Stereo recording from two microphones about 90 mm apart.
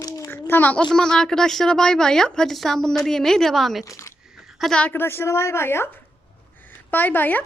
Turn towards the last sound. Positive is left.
turn(degrees=20)  # may be behind; listen again after turning